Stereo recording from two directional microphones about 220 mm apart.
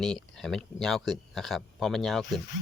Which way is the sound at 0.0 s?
5° left (ahead or behind).